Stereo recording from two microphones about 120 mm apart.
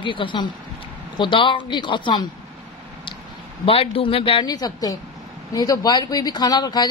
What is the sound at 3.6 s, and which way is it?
Speech, 50° left (ahead or behind).